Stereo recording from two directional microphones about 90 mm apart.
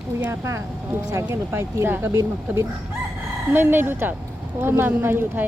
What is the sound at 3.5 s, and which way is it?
Speech, 20° right (ahead or behind).